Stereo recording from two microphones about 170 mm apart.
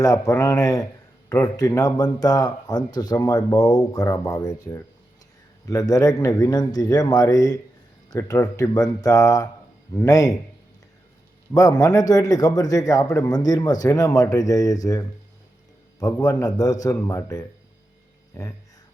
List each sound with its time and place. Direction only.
0.0 s a man's voice: 20° left (ahead or behind)
11.5 s a man's voice: 20° left (ahead or behind)
16.2 s a man's voice: 20° left (ahead or behind)